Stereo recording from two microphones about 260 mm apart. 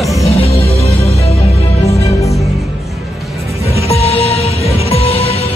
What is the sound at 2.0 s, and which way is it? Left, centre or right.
Music, centre.